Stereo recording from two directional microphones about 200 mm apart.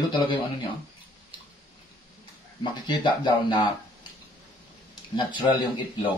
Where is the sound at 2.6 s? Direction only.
25° left (ahead or behind).